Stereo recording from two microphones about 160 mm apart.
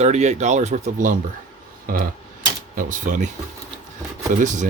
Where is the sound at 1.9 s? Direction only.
65° right (ahead or behind).